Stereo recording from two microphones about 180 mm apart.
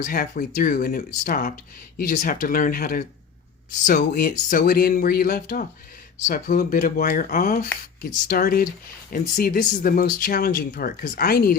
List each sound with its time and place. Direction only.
0.0 s speech: 55° left (ahead or behind)